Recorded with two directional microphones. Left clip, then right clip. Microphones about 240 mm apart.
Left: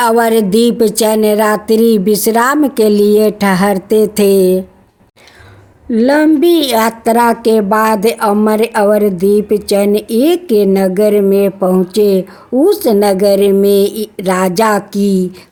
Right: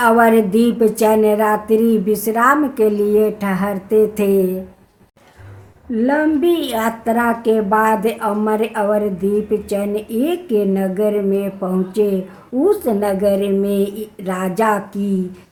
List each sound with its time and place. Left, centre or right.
0.0 s a woman's voice: left
5.9 s a woman's voice: left